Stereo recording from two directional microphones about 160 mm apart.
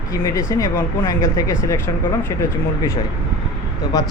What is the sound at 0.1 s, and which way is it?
Speech, 20° left (ahead or behind).